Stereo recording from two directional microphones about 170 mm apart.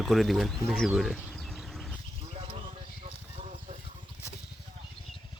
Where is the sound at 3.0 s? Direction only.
40° right (ahead or behind).